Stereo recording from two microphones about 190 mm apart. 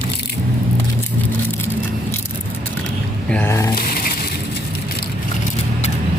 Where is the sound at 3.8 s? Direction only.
50° left (ahead or behind).